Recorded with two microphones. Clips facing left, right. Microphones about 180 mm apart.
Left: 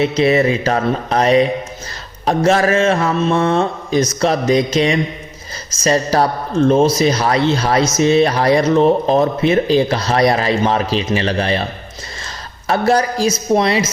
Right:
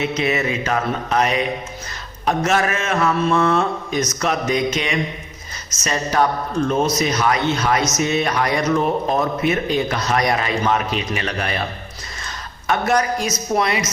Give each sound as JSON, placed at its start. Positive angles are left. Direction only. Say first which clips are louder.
{"t": 0.0, "sound": "speech", "louder": "left 7 dB", "side_deg": 35}
{"t": 12.6, "sound": "speech", "louder": "left 4 dB", "side_deg": 30}